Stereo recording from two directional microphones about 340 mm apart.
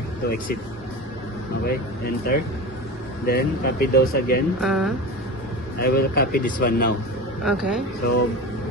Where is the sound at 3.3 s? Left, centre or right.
Left.